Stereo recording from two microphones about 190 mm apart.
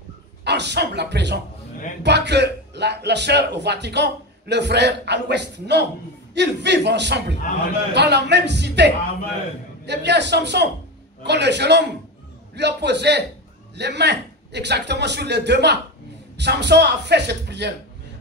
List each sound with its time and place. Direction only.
0.4 s a man's voice: 65° right (ahead or behind)